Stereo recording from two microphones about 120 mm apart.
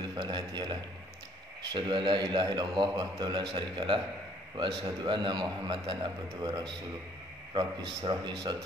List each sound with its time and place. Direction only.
0.1 s a man's voice: 35° right (ahead or behind)
7.5 s a man's voice: 40° right (ahead or behind)